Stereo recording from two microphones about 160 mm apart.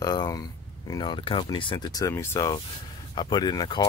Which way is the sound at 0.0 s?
25° left (ahead or behind).